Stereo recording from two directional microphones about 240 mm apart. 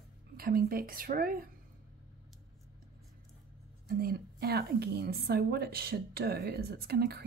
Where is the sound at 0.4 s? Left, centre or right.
Right.